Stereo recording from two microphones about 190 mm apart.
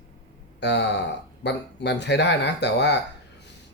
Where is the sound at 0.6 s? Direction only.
65° left (ahead or behind).